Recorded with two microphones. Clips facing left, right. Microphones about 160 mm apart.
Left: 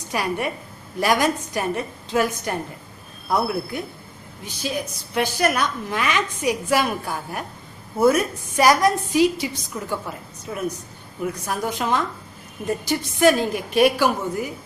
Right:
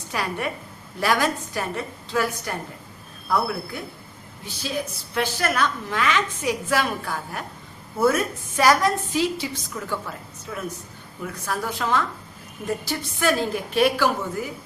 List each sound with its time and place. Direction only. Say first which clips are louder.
0.1 s a woman's voice: left 3 dB; 15° left (ahead or behind)
9.7 s a woman's voice: left 2 dB; 25° left (ahead or behind)